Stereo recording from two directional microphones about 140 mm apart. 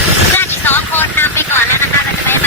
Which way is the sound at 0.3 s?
15° left (ahead or behind).